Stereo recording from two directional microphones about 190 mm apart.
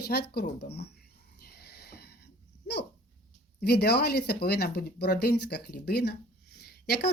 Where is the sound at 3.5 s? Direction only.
60° left (ahead or behind).